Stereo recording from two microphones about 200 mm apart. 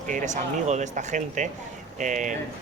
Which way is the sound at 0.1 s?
40° right (ahead or behind).